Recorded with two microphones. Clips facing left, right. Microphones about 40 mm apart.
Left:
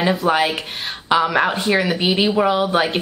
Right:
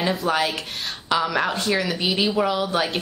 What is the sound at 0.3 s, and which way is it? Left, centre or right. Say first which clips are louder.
Speech: left 5 dB; left.